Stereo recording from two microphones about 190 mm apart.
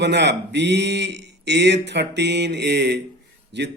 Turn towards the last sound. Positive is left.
turn(degrees=-65)  # may be behind; listen again after turning